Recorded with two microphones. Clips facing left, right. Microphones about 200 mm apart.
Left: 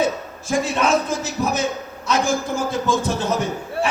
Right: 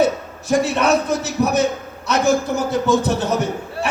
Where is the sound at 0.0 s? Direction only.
65° right (ahead or behind).